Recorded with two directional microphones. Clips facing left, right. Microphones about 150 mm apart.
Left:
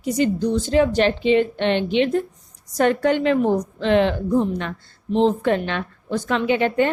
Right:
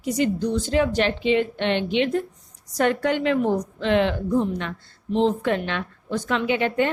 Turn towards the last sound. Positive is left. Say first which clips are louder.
# left 3 dB
turn(degrees=40)  # may be behind; listen again after turning